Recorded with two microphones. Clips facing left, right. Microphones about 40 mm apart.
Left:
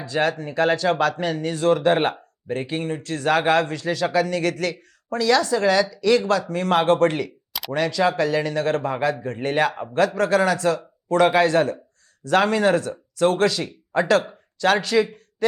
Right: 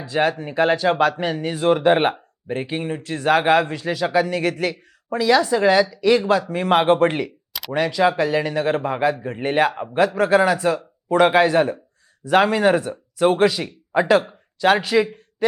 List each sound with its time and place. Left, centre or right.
0.0 s speech: centre